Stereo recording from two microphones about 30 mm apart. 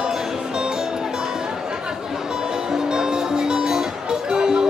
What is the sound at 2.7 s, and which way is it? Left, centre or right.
Music, right.